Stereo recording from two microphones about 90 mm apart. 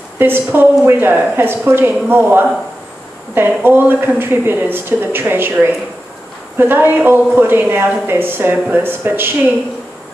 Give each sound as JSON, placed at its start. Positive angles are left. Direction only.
{"t": 0.2, "sound": "a woman's voice", "side_deg": -25}